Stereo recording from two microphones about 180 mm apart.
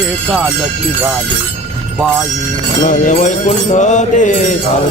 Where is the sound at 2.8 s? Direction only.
45° left (ahead or behind).